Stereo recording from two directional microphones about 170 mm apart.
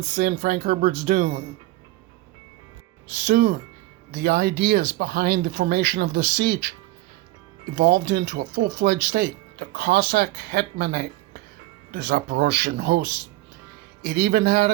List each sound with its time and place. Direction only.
0.1 s speech: 60° right (ahead or behind)
3.2 s speech: 70° right (ahead or behind)
7.8 s speech: 80° right
14.1 s speech: 70° right (ahead or behind)